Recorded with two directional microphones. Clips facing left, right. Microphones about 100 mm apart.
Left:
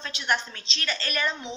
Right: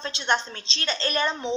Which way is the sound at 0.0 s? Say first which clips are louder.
Right 3 dB; 30° right (ahead or behind).